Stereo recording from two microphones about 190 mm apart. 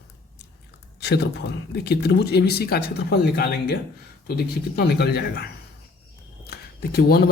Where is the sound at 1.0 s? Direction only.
60° left (ahead or behind).